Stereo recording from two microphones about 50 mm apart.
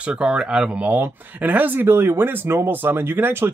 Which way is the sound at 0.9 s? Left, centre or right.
Right.